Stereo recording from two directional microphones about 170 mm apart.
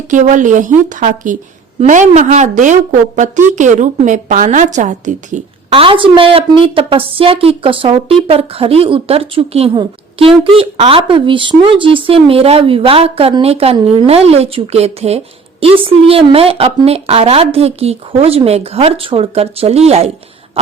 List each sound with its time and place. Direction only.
0.1 s a woman's voice: 45° right (ahead or behind)
5.7 s a woman's voice: 30° right (ahead or behind)